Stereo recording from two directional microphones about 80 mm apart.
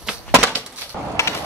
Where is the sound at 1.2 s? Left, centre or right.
Left.